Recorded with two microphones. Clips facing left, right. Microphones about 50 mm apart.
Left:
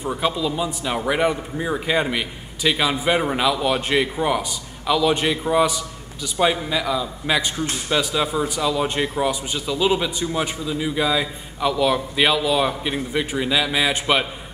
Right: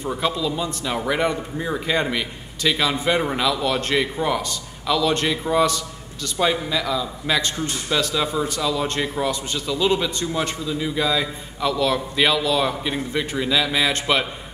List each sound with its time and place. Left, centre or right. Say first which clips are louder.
0.0 s a man's voice: left 1 dB; centre